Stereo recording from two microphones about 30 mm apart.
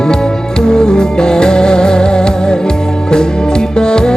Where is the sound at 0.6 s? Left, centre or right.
Left.